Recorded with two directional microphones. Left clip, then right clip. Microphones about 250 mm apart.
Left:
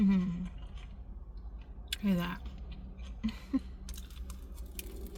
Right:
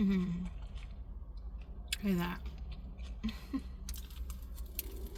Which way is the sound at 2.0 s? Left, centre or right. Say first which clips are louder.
Left 3 dB; centre.